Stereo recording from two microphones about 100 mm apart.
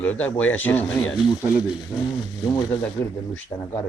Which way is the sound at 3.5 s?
15° left (ahead or behind).